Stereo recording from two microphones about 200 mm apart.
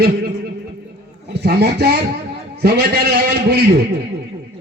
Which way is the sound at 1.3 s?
55° right (ahead or behind).